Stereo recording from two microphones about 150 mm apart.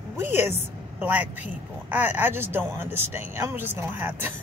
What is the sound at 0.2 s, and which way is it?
A man's voice, 15° right (ahead or behind).